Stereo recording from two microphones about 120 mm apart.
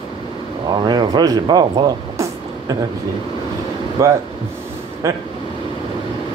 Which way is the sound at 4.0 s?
25° right (ahead or behind).